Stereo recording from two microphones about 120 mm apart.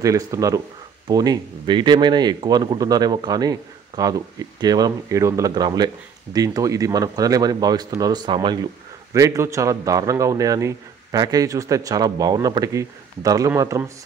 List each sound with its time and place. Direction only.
0.0 s a man's voice: 30° right (ahead or behind)
9.1 s a man's voice: 25° right (ahead or behind)